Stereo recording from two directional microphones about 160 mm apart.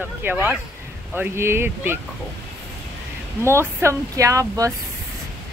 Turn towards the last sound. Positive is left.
turn(degrees=-20)  # may be behind; listen again after turning